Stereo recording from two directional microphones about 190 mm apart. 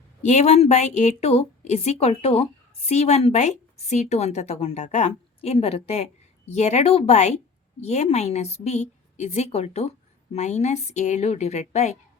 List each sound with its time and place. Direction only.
0.2 s a woman's voice: 35° left (ahead or behind)